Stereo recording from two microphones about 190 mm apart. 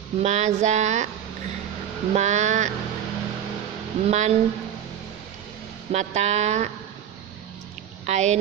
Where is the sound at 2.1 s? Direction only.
35° right (ahead or behind).